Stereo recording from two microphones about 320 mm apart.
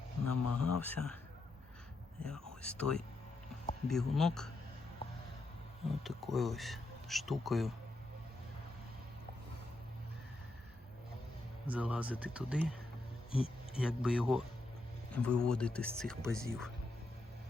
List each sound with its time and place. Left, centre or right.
0.3 s speech: left
0.8 s speech: centre
2.5 s speech: centre
6.0 s speech: centre
11.6 s speech: centre